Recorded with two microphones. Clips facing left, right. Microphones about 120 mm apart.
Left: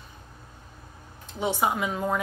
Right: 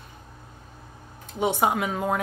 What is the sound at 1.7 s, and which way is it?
Speech, 60° right (ahead or behind).